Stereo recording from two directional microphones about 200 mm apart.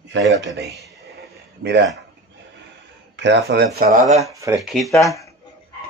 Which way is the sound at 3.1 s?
60° right (ahead or behind).